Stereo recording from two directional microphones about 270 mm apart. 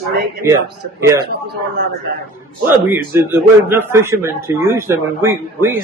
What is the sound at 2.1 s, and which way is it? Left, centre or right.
Speech, right.